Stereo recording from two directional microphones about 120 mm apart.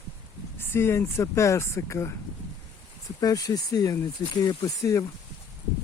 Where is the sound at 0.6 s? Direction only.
20° left (ahead or behind).